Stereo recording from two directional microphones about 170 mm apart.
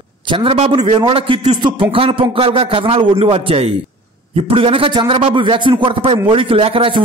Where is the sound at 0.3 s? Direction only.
30° right (ahead or behind).